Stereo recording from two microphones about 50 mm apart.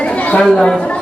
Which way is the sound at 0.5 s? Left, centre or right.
Centre.